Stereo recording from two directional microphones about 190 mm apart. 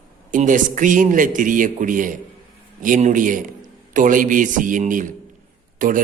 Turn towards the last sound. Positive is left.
turn(degrees=-45)  # may be behind; listen again after turning